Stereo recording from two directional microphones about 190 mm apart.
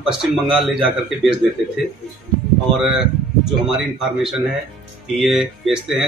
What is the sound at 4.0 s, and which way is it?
Speech, centre (ahead or behind).